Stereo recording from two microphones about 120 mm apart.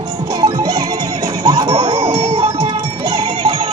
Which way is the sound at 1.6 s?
50° right (ahead or behind).